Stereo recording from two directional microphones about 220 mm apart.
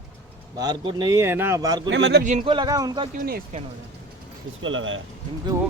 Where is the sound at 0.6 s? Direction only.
20° right (ahead or behind).